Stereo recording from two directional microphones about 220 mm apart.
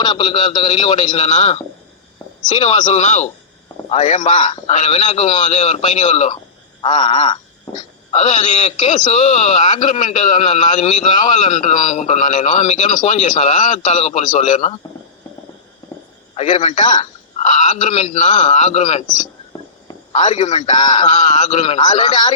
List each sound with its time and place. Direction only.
0.0 s a man's voice: 20° left (ahead or behind)
1.1 s a man's voice: 30° left (ahead or behind)
8.1 s a man's voice: 30° left (ahead or behind)
16.3 s a man's voice: 30° left (ahead or behind)